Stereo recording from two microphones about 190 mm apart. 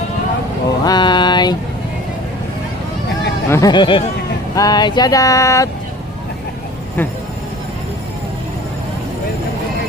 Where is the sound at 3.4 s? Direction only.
15° left (ahead or behind).